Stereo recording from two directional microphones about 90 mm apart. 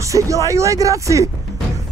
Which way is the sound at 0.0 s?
35° right (ahead or behind).